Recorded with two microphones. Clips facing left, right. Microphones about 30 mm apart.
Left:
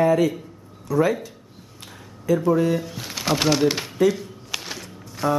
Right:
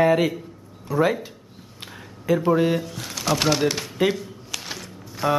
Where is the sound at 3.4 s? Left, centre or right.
Centre.